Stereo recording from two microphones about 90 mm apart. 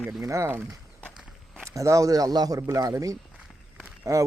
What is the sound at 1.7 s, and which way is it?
A man's voice, 35° right (ahead or behind).